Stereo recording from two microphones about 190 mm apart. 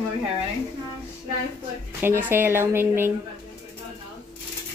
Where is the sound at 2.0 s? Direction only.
10° right (ahead or behind).